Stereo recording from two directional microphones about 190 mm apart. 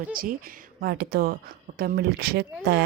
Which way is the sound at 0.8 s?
55° right (ahead or behind).